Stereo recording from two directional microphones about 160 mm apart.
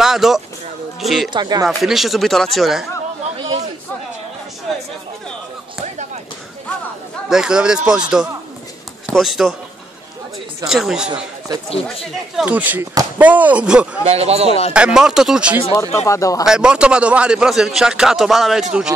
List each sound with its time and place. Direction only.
0.0 s music: centre (ahead or behind)
1.0 s a man's voice: centre (ahead or behind)
1.3 s speech: 25° right (ahead or behind)
1.8 s a man's voice: centre (ahead or behind)
3.3 s a man's voice: 35° right (ahead or behind)
7.2 s a man's voice: 5° right (ahead or behind)
10.7 s a man's voice: 5° right (ahead or behind)
11.1 s speech: 25° right (ahead or behind)
12.4 s speech: 10° right (ahead or behind)
14.0 s a man's voice: 40° right (ahead or behind)
14.7 s a man's voice: 5° right (ahead or behind)
15.7 s speech: 20° left (ahead or behind)
16.4 s a man's voice: 5° right (ahead or behind)